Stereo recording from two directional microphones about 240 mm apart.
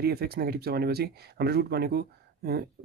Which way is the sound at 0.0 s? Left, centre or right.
Right.